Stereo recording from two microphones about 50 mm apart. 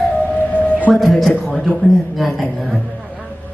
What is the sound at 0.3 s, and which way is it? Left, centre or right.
Music, left.